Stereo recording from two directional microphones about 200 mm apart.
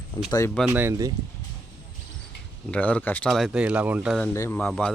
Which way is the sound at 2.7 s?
5° left (ahead or behind).